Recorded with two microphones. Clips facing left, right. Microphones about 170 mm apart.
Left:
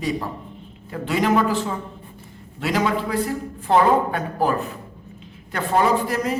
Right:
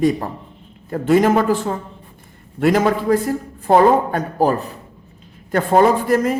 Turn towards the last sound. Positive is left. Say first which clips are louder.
# right 6 dB
turn(degrees=-50)  # may be behind; listen again after turning